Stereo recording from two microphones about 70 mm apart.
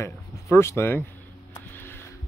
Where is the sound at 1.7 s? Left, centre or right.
Left.